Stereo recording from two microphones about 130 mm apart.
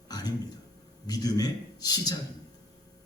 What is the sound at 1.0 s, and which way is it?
A man's voice, 30° left (ahead or behind).